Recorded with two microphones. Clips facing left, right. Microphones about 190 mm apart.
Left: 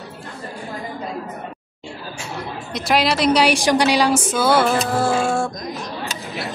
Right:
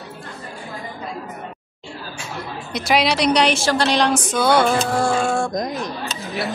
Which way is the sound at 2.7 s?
Centre (ahead or behind).